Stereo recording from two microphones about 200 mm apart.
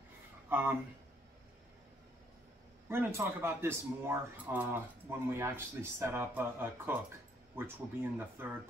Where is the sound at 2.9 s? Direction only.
10° right (ahead or behind).